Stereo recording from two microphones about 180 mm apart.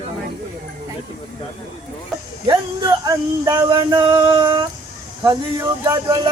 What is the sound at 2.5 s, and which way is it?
Speech, 25° right (ahead or behind).